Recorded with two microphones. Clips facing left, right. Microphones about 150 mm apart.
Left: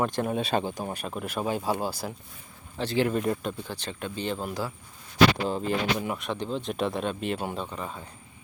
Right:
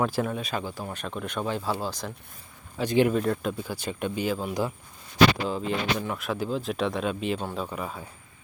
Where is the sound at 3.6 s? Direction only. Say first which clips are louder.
Right 4 dB; 10° right (ahead or behind).